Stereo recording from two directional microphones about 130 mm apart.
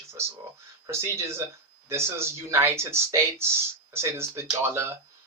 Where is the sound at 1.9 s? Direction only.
20° right (ahead or behind).